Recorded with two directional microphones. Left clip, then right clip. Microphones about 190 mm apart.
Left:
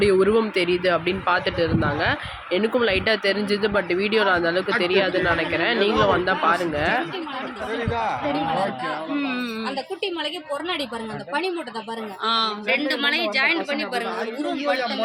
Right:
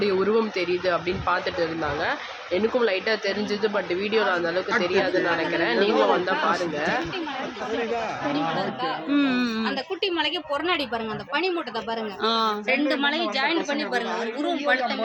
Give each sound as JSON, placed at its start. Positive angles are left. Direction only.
{"t": 0.0, "sound": "speech", "side_deg": 15}
{"t": 9.1, "sound": "speech", "side_deg": -55}
{"t": 12.2, "sound": "speech", "side_deg": -45}
{"t": 13.0, "sound": "a woman's voice", "side_deg": -25}